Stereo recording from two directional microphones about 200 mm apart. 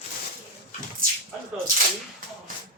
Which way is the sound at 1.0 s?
45° right (ahead or behind).